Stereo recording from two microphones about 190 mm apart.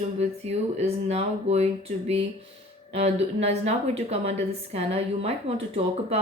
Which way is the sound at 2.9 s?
35° right (ahead or behind).